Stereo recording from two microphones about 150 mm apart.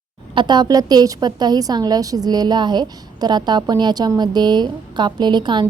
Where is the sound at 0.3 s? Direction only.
30° right (ahead or behind).